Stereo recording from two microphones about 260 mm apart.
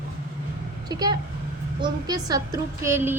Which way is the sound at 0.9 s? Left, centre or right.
Centre.